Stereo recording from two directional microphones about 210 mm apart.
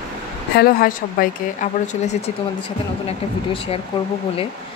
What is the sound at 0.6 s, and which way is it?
A woman's voice, 45° left (ahead or behind).